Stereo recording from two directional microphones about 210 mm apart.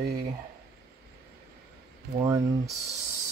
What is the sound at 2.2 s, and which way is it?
Speech, 15° right (ahead or behind).